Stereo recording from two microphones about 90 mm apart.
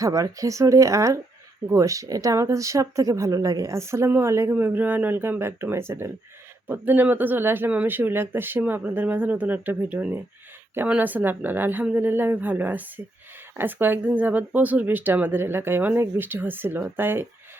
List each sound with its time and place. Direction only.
0.0 s speech: 40° right (ahead or behind)
4.5 s speech: 20° right (ahead or behind)